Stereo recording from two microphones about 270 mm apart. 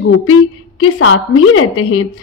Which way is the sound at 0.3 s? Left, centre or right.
Left.